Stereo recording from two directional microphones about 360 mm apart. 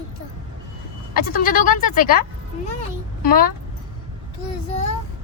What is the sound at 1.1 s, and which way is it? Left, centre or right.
Speech, left.